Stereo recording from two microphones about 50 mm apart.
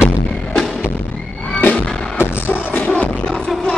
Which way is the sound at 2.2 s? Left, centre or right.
Left.